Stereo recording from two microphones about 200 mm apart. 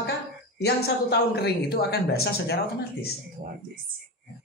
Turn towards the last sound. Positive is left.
turn(degrees=50)  # may be behind; listen again after turning